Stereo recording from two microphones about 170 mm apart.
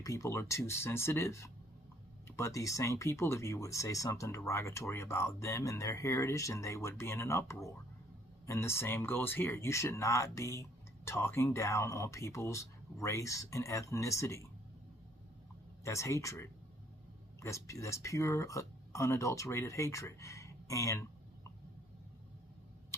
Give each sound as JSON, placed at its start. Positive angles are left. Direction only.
{"t": 0.0, "sound": "speech", "side_deg": 20}
{"t": 15.8, "sound": "speech", "side_deg": 15}